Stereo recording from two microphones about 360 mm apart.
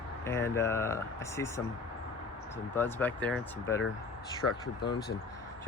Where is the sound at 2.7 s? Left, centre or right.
Centre.